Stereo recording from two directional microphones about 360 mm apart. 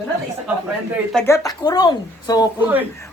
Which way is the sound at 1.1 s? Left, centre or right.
Centre.